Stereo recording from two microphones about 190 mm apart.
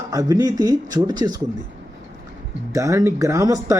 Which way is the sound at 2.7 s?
15° right (ahead or behind).